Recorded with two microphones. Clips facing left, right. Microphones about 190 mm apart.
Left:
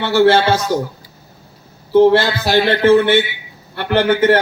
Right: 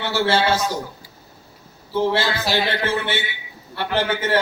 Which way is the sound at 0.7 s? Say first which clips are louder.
Left 9 dB; 55° left (ahead or behind).